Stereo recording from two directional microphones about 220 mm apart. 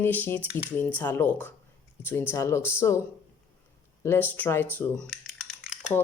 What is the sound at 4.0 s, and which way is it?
Typing, 10° left (ahead or behind).